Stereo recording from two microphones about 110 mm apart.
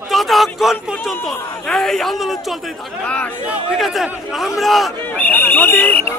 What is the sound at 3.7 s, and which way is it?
A man's voice, centre (ahead or behind).